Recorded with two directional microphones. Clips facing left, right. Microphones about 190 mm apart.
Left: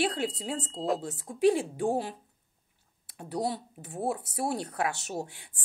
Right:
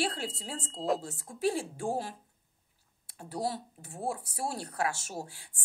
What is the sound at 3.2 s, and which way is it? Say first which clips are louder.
A woman's voice: left 3 dB; 20° left (ahead or behind).